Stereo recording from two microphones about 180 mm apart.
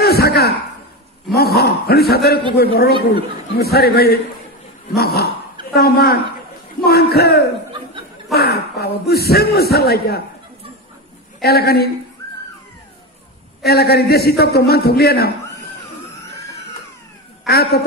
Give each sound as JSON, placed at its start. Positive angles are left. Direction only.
{"t": 0.0, "sound": "a sound", "side_deg": 60}
{"t": 1.6, "sound": "a man's voice", "side_deg": 60}
{"t": 11.4, "sound": "a man's voice", "side_deg": 60}
{"t": 13.7, "sound": "a man's voice", "side_deg": 60}
{"t": 17.5, "sound": "a man's voice", "side_deg": 60}